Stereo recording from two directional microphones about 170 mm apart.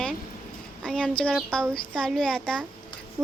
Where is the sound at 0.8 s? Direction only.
5° left (ahead or behind).